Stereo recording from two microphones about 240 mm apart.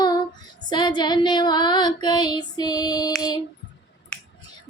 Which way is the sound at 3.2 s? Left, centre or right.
Centre.